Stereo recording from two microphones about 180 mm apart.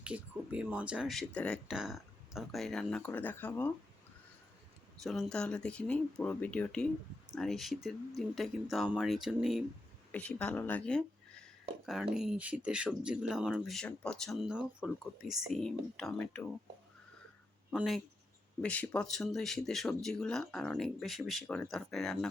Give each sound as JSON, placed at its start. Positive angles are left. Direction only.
{"t": 0.0, "sound": "speech", "side_deg": -5}
{"t": 5.0, "sound": "speech", "side_deg": 0}
{"t": 17.7, "sound": "speech", "side_deg": 0}